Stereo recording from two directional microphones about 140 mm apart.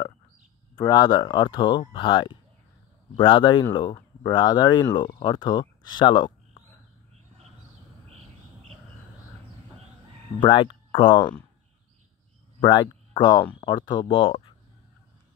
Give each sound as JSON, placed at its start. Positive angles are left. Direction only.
{"t": 0.7, "sound": "speech", "side_deg": 30}
{"t": 10.4, "sound": "speech", "side_deg": 35}
{"t": 12.5, "sound": "speech", "side_deg": 30}